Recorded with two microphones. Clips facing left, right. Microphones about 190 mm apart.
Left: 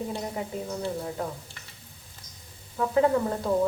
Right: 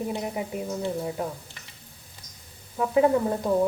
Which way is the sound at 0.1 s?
15° right (ahead or behind).